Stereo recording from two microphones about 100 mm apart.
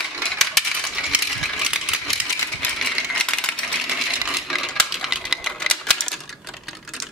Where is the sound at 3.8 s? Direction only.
5° right (ahead or behind).